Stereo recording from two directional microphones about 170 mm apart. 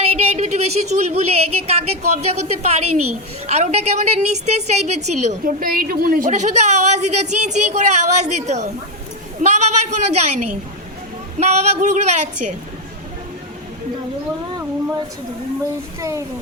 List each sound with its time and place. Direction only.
0.0 s a woman's voice: 35° right (ahead or behind)
5.6 s a woman's voice: 60° right (ahead or behind); by 10.3 s 40° right (ahead or behind)
11.3 s a woman's voice: 40° right (ahead or behind)
16.0 s speech: 15° right (ahead or behind)